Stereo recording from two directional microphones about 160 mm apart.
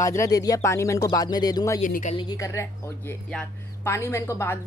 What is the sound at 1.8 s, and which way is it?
Speech, 50° left (ahead or behind).